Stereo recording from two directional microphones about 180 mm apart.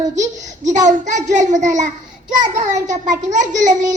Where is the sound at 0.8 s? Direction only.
45° right (ahead or behind).